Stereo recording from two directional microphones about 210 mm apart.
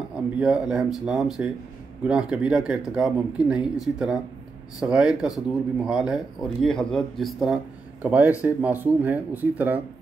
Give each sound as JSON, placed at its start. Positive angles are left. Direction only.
{"t": 0.4, "sound": "speech", "side_deg": -5}